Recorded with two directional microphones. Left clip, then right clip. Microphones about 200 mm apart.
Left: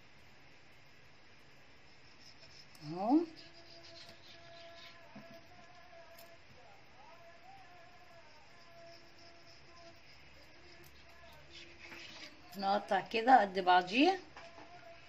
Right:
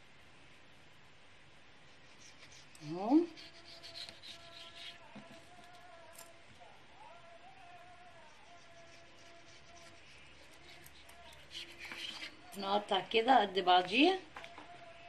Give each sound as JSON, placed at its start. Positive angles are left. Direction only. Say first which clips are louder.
{"t": 2.9, "sound": "toothbrush", "louder": "left 1 dB", "side_deg": 50}
{"t": 12.5, "sound": "a woman's voice", "louder": "left 1 dB", "side_deg": 45}